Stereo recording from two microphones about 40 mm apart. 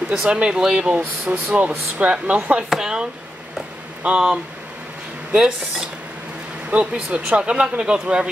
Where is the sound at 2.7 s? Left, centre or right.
Centre.